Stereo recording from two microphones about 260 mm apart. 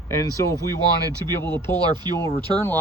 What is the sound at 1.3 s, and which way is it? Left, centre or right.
Speech, centre.